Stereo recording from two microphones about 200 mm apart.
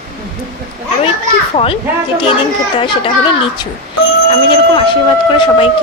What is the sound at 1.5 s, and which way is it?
Speech, 30° left (ahead or behind).